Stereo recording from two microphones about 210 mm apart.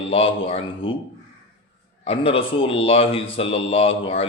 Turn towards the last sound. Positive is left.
turn(degrees=25)  # may be behind; listen again after turning